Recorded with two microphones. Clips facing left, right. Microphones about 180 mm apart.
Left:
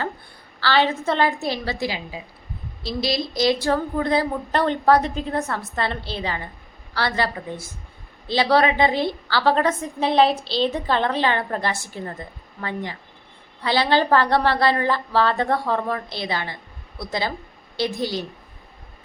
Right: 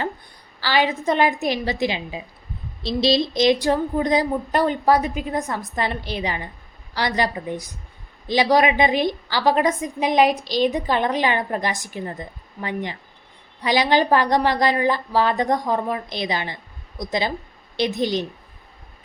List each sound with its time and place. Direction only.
0.6 s a woman's voice: 15° right (ahead or behind)